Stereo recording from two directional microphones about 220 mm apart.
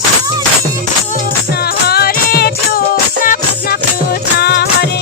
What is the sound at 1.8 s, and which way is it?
Music, 45° left (ahead or behind).